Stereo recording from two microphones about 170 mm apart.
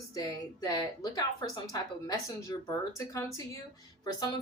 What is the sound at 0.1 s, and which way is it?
Speech, 25° left (ahead or behind).